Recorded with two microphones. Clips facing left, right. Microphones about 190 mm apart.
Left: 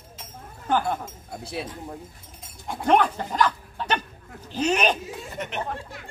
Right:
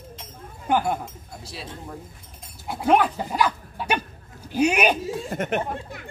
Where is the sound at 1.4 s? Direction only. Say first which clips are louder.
Left 7 dB; 55° left (ahead or behind).